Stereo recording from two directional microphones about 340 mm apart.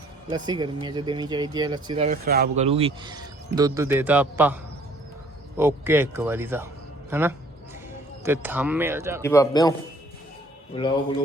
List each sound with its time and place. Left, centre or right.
0.3 s speech: centre
5.5 s speech: centre
9.2 s a man's voice: centre
10.7 s a man's voice: centre